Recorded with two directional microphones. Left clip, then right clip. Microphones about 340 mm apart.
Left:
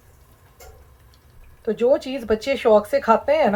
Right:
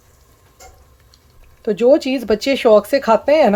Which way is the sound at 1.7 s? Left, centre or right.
Right.